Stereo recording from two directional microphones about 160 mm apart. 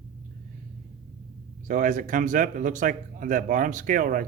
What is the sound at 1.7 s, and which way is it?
A man's voice, 55° right (ahead or behind).